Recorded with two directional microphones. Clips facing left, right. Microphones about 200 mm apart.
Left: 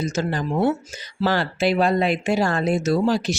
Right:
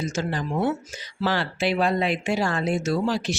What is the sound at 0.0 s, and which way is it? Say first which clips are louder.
Speech: left 3 dB; 40° left (ahead or behind).